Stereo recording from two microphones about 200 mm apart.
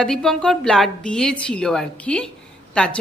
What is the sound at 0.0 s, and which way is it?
A woman's voice, 5° left (ahead or behind).